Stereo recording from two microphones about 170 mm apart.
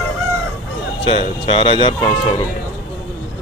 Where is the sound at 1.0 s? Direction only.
30° left (ahead or behind).